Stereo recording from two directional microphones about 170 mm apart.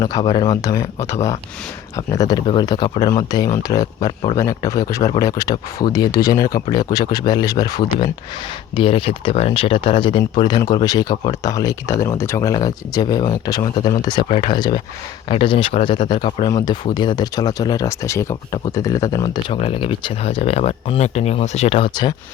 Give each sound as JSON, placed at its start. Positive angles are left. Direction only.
{"t": 0.0, "sound": "speech", "side_deg": 25}